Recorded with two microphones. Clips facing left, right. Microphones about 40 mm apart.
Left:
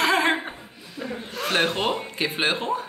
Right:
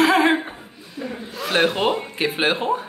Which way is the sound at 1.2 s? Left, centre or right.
Left.